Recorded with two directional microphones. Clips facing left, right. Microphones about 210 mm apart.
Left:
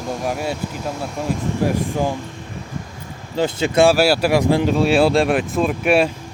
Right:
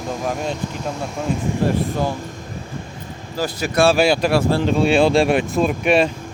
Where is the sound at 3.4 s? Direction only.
25° left (ahead or behind).